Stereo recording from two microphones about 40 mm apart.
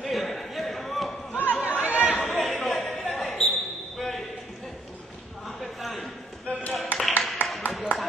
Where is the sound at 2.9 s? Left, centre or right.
Centre.